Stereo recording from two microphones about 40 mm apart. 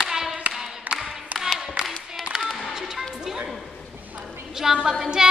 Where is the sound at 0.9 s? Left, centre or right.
Right.